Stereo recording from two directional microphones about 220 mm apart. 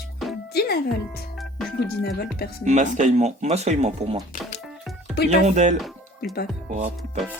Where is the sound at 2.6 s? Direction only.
35° right (ahead or behind).